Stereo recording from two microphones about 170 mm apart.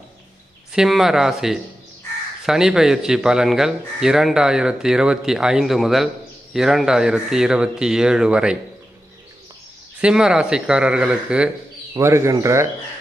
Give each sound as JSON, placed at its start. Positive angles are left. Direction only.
{"t": 0.7, "sound": "a man's voice", "side_deg": 0}
{"t": 10.0, "sound": "a man's voice", "side_deg": -5}